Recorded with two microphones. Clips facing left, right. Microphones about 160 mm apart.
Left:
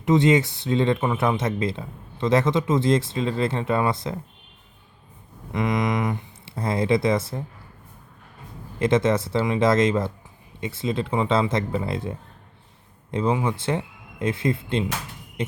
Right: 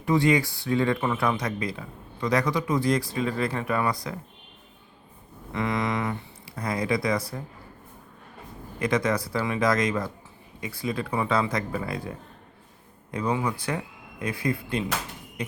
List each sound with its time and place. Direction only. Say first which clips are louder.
0.0 s speech: left 4 dB; 20° left (ahead or behind)
5.5 s speech: left 3 dB; 20° left (ahead or behind)
8.8 s speech: left 5 dB; 25° left (ahead or behind)
15.4 s a sound: left 5 dB; 25° left (ahead or behind)